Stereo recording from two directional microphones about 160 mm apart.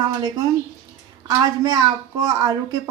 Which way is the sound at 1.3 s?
25° right (ahead or behind).